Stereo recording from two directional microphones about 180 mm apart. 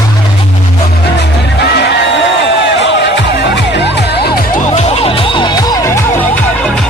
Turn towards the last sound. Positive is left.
turn(degrees=20)  # may be behind; listen again after turning